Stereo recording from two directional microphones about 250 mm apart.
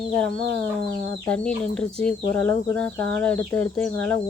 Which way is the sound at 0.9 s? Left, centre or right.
Centre.